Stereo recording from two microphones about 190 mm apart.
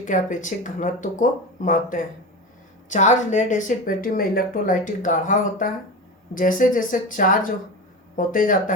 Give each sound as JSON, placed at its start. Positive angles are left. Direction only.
{"t": 0.0, "sound": "speech", "side_deg": 40}